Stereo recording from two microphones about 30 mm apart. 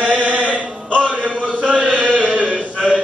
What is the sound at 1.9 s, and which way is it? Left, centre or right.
Chant, right.